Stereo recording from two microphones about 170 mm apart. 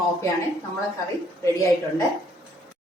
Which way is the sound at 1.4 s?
20° left (ahead or behind).